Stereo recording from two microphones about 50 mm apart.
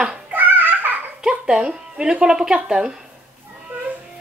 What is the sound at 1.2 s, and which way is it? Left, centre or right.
Speech, centre.